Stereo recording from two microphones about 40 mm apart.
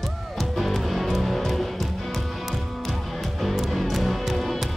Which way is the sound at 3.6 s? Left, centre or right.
Centre.